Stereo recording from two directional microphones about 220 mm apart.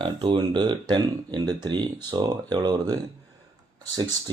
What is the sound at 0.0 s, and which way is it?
Speech, 20° right (ahead or behind).